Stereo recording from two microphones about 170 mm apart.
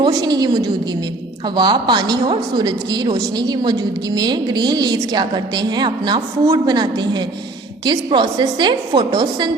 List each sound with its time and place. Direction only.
0.0 s a woman's voice: 25° right (ahead or behind)